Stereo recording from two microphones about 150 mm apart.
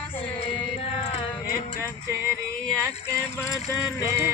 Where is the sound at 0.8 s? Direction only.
40° left (ahead or behind).